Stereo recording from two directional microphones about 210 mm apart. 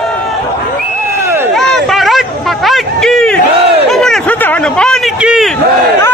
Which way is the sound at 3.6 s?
30° right (ahead or behind).